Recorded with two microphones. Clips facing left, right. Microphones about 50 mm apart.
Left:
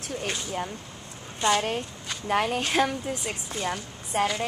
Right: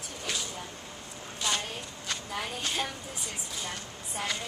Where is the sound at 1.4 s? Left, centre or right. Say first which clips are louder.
Left 9 dB; left.